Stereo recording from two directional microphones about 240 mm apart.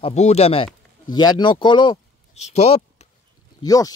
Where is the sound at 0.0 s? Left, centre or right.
Left.